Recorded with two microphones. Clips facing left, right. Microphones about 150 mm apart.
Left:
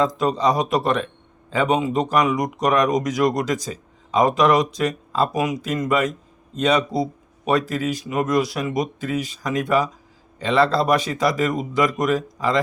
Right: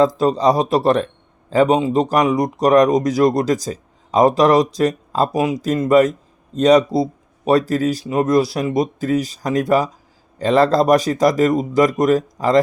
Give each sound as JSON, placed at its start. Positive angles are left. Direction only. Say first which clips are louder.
{"t": 0.2, "sound": "a man's voice", "louder": "right 4 dB", "side_deg": -35}